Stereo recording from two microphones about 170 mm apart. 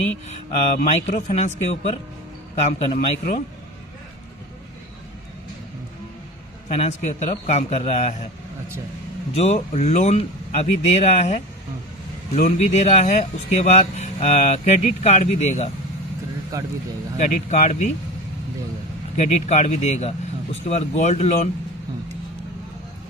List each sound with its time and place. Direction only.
0.9 s speech: 45° left (ahead or behind)
6.7 s speech: 40° left (ahead or behind)
9.3 s speech: 40° left (ahead or behind)
12.4 s speech: 45° left (ahead or behind)
16.5 s speech: 20° right (ahead or behind)
17.2 s speech: 45° left (ahead or behind)
19.1 s speech: 40° left (ahead or behind)